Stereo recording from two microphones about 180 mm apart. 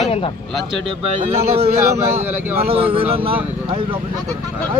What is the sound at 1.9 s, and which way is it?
Speech, 15° right (ahead or behind).